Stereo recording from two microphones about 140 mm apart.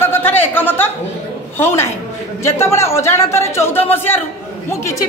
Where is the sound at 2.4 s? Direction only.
20° left (ahead or behind).